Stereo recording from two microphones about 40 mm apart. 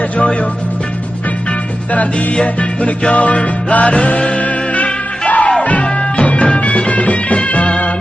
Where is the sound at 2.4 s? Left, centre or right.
Left.